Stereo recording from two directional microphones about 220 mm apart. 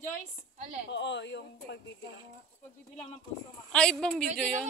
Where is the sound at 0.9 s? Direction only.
55° left (ahead or behind).